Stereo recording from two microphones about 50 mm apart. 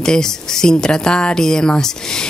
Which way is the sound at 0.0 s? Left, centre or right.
Centre.